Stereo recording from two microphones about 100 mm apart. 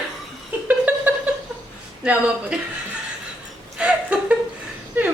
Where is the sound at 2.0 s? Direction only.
10° right (ahead or behind).